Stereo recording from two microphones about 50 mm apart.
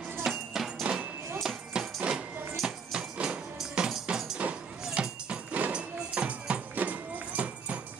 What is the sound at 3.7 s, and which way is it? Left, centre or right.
Music, centre.